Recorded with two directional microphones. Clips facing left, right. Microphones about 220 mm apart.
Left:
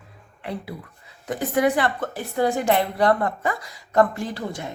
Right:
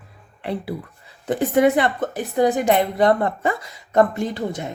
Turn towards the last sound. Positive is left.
turn(degrees=-20)  # may be behind; listen again after turning